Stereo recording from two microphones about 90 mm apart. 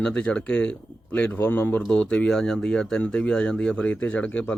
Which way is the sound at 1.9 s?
10° left (ahead or behind).